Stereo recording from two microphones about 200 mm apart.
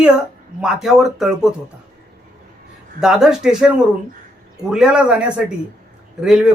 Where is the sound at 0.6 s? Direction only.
Centre (ahead or behind).